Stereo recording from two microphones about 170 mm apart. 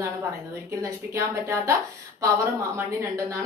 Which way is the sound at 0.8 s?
15° right (ahead or behind).